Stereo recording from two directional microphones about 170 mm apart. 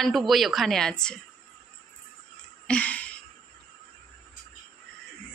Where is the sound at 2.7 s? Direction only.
10° left (ahead or behind).